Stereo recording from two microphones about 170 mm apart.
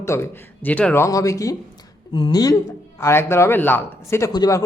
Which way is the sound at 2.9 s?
15° left (ahead or behind).